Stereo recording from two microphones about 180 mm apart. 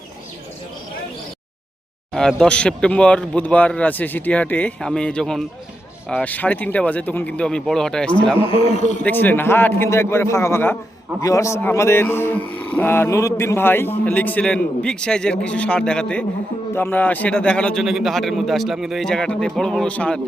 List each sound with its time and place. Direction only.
2.1 s a man's voice: 5° left (ahead or behind)
8.4 s a man's voice: 35° left (ahead or behind)
9.0 s a man's voice: 10° left (ahead or behind)